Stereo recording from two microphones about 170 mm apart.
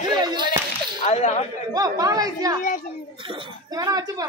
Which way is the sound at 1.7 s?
20° right (ahead or behind).